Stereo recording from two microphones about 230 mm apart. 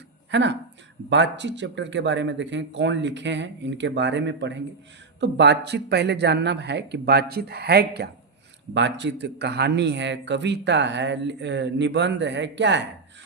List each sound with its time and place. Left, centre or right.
0.3 s speech: right